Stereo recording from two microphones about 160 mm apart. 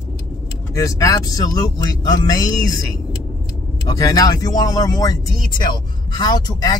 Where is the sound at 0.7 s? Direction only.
20° left (ahead or behind).